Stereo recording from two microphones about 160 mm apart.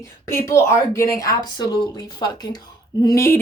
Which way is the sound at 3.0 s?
20° left (ahead or behind).